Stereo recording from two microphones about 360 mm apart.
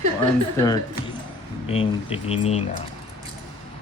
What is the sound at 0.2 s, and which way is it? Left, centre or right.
Speech, centre.